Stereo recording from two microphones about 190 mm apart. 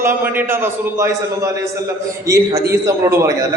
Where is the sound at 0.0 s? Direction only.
10° right (ahead or behind).